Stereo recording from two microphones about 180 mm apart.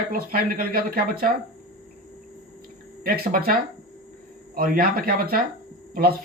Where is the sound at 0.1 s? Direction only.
55° right (ahead or behind).